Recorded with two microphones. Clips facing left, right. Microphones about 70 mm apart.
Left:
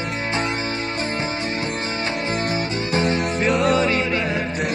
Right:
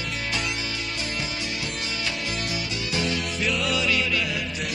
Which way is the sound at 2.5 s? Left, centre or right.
Left.